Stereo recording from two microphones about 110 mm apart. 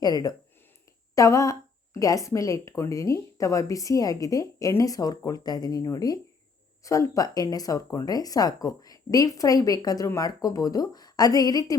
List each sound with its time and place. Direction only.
0.0 s a woman's voice: 35° left (ahead or behind)